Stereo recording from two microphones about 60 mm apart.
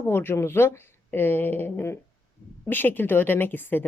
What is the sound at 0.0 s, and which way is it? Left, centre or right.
A woman's voice, left.